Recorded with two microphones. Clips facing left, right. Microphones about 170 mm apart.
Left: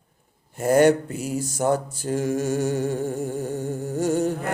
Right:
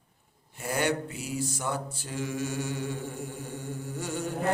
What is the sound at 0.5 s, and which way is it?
Mantra, 45° left (ahead or behind).